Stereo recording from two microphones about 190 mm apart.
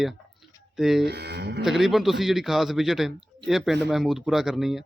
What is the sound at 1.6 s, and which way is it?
Speech, centre (ahead or behind).